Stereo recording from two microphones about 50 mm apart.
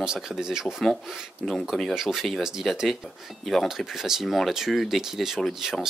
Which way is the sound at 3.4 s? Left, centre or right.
Centre.